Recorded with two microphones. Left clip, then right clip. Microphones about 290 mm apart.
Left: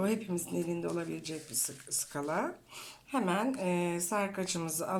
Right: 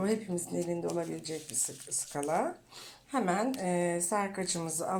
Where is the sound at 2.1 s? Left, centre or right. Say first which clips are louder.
Right 3 dB; centre.